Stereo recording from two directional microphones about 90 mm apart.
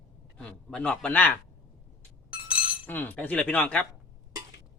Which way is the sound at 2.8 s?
20° left (ahead or behind).